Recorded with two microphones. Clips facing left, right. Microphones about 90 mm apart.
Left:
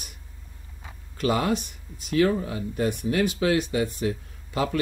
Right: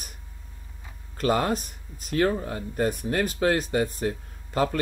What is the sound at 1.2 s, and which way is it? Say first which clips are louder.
Speech: even; 40° right (ahead or behind).